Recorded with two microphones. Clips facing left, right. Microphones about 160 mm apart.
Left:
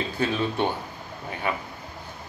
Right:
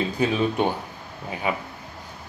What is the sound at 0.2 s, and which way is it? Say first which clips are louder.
A man's voice: right 2 dB; 15° right (ahead or behind).